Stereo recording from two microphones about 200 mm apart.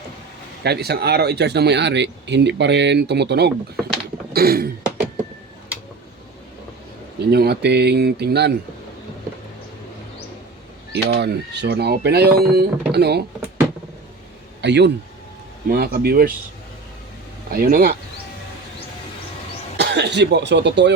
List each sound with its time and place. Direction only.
0.6 s speech: 55° right (ahead or behind)
4.3 s throat clearing: 50° right (ahead or behind)
7.3 s speech: 55° right (ahead or behind)
10.9 s speech: 55° right (ahead or behind)
14.6 s a man's voice: 60° right (ahead or behind)
17.5 s speech: 45° right (ahead or behind)
19.7 s speech: 60° right (ahead or behind)